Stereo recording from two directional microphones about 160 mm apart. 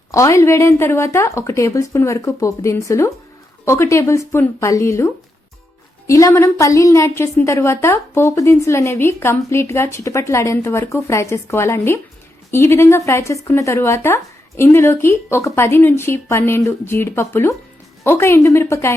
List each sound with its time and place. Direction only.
0.1 s a woman's voice: 20° left (ahead or behind)